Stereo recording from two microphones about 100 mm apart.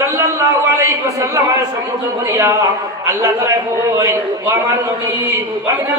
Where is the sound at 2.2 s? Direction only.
30° right (ahead or behind).